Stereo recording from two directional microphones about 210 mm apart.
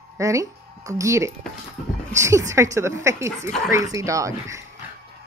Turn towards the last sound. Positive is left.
turn(degrees=-15)  # may be behind; listen again after turning